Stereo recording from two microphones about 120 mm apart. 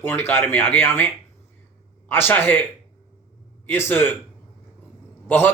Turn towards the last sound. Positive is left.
turn(degrees=20)  # may be behind; listen again after turning